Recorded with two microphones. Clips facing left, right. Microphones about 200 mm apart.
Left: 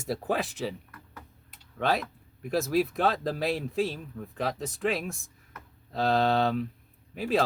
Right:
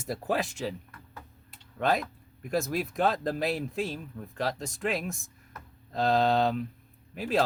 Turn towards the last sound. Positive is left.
turn(degrees=0)  # may be behind; listen again after turning